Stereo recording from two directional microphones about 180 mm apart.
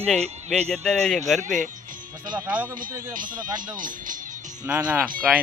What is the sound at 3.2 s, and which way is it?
Speech, 50° right (ahead or behind).